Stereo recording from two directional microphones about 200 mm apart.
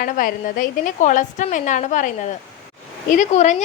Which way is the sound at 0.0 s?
45° left (ahead or behind).